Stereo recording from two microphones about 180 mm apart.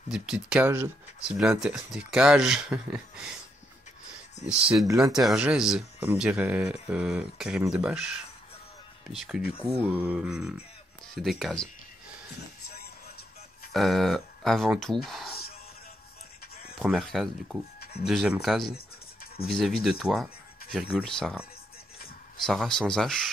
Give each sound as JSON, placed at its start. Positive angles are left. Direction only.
{"t": 0.1, "sound": "speech", "side_deg": -5}
{"t": 4.5, "sound": "speech", "side_deg": -5}
{"t": 13.7, "sound": "speech", "side_deg": 0}
{"t": 16.7, "sound": "speech", "side_deg": 0}